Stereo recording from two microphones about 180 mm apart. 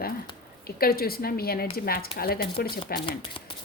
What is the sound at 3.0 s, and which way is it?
Speech, 30° left (ahead or behind).